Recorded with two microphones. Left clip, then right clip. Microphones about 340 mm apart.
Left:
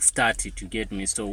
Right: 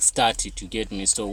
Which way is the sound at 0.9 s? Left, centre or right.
Right.